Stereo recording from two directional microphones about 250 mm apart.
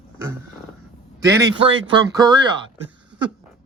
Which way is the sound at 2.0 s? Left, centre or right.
Centre.